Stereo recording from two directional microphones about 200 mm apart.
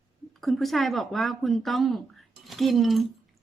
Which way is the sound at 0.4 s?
Centre (ahead or behind).